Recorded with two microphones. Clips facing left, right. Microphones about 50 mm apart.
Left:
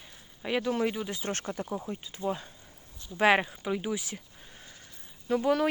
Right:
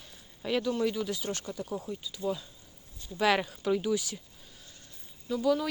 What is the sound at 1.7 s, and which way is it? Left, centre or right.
Speech, left.